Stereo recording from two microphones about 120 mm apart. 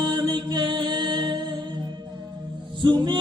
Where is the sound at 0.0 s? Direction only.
40° right (ahead or behind).